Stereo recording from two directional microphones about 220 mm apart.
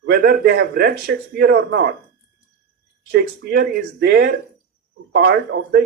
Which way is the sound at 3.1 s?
50° right (ahead or behind).